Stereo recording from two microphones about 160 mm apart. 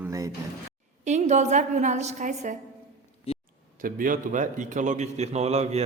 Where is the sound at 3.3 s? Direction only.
40° left (ahead or behind).